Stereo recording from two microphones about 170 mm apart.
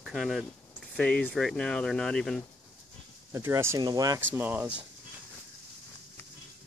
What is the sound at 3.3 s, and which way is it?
Speech, 15° right (ahead or behind).